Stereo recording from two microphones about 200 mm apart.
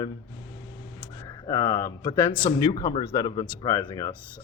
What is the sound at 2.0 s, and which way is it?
Speech, 25° left (ahead or behind).